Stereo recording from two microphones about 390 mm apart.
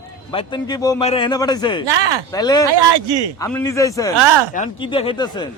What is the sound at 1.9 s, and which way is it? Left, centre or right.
Speech, right.